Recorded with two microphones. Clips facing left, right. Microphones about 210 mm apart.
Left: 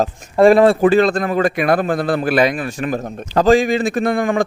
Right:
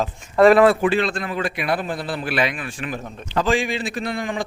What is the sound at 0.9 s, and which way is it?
A man's voice, 40° left (ahead or behind).